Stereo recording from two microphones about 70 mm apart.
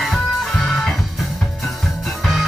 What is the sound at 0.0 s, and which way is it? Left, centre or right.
Music, centre.